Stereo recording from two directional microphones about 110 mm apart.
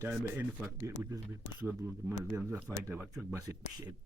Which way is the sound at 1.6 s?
20° right (ahead or behind).